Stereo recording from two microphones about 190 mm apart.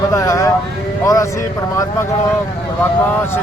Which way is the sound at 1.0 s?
15° left (ahead or behind).